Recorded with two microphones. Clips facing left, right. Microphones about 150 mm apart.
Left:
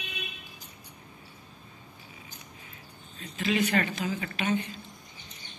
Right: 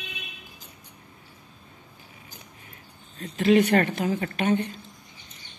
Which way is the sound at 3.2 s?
55° right (ahead or behind).